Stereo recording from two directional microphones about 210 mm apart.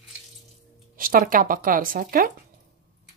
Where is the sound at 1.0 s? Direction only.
40° right (ahead or behind).